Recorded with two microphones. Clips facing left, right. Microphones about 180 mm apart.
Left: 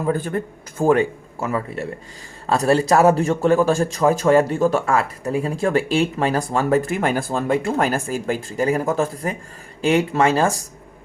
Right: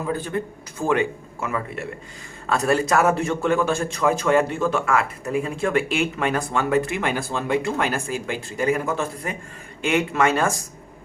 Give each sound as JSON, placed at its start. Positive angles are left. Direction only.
{"t": 0.0, "sound": "a man's voice", "side_deg": 50}